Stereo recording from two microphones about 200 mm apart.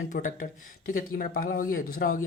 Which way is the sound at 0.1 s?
40° left (ahead or behind).